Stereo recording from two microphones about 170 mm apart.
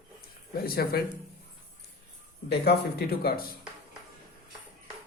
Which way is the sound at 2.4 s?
70° left (ahead or behind).